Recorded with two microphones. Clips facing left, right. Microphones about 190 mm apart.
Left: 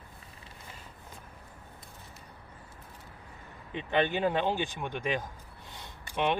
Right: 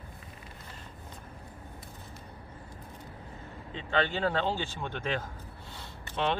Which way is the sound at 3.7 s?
15° left (ahead or behind).